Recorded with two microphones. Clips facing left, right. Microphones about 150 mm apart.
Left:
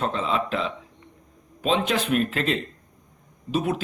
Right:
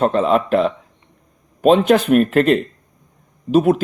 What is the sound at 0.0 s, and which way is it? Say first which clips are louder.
Speech: right 10 dB; 55° right (ahead or behind).